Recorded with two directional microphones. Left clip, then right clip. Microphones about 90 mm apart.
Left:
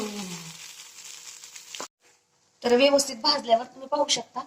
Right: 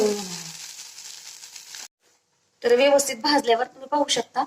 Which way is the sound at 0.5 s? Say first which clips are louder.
Right 4 dB; 35° left (ahead or behind).